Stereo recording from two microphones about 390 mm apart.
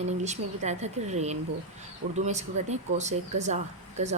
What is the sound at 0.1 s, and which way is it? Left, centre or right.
A woman's voice, centre.